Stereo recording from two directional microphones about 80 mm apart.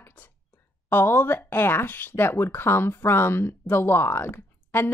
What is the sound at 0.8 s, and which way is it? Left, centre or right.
Speech, left.